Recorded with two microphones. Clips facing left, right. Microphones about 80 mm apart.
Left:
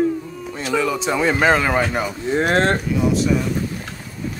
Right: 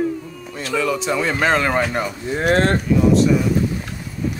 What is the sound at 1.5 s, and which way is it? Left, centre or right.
Speech, centre.